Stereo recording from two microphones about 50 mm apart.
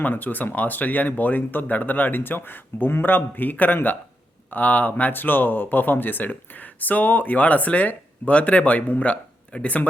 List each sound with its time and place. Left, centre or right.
0.0 s speech: left